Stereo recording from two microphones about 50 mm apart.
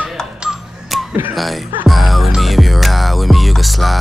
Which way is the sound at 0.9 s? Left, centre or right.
Centre.